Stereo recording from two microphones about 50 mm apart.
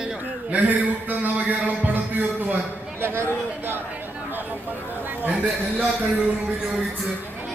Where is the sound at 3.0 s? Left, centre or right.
Right.